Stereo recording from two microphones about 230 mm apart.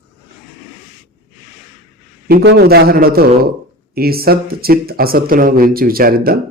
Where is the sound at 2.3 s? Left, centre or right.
Right.